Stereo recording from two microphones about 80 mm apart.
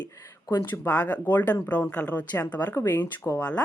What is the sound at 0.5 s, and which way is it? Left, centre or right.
Speech, left.